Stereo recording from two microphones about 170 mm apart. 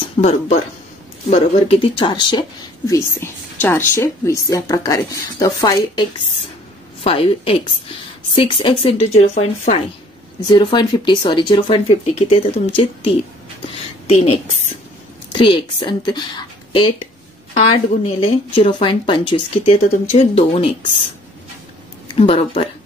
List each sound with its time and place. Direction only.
0.2 s a woman's voice: 40° left (ahead or behind)
2.9 s speech: 15° left (ahead or behind)
7.0 s a woman's voice: 35° left (ahead or behind)
10.5 s a woman's voice: 25° left (ahead or behind)
15.3 s a woman's voice: 30° left (ahead or behind)
22.2 s a woman's voice: 35° left (ahead or behind)